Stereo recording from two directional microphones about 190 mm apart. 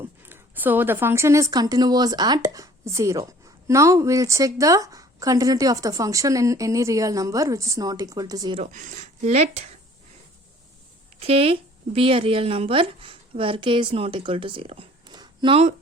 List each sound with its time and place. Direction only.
0.3 s a woman's voice: 10° right (ahead or behind)
8.6 s speech: 40° right (ahead or behind)
11.2 s a woman's voice: 30° right (ahead or behind)